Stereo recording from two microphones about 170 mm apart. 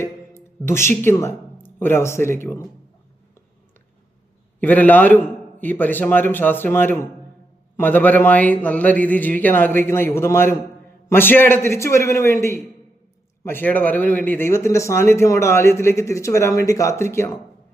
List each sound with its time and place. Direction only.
0.0 s speech: 15° left (ahead or behind)
4.6 s speech: 10° left (ahead or behind)